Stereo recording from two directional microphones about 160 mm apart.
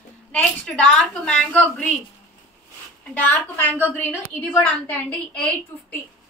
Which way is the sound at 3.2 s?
10° left (ahead or behind).